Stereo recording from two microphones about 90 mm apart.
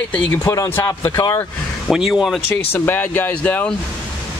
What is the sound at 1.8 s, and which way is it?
Speech, 5° right (ahead or behind).